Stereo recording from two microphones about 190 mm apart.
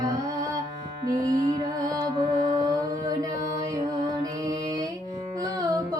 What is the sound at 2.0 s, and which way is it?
Mantra, 20° right (ahead or behind).